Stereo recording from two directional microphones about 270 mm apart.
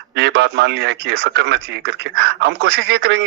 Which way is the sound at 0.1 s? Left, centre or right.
Right.